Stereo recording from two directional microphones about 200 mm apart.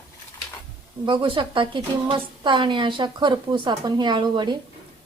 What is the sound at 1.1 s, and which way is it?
A woman's voice, 25° right (ahead or behind).